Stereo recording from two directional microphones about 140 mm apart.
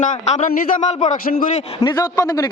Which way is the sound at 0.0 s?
60° left (ahead or behind).